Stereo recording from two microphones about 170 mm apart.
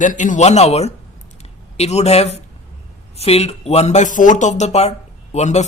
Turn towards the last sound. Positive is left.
turn(degrees=40)  # may be behind; listen again after turning